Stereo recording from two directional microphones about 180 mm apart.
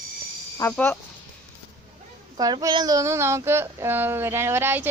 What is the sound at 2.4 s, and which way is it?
Speech, 20° right (ahead or behind).